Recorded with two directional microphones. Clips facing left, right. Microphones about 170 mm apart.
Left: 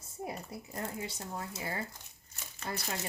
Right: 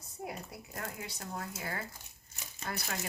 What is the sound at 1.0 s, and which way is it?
Speech, 25° left (ahead or behind).